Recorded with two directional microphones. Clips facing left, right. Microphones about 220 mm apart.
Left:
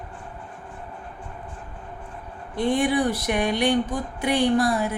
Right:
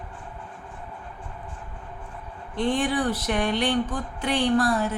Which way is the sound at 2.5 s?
10° left (ahead or behind).